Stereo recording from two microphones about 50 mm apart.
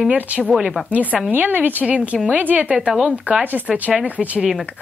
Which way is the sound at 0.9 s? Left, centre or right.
Right.